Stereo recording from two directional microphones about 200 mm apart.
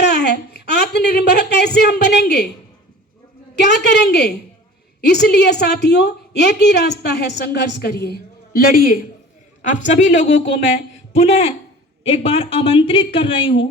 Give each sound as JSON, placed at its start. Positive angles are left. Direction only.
{"t": 0.0, "sound": "a woman's voice", "side_deg": 55}
{"t": 3.5, "sound": "a woman's voice", "side_deg": 60}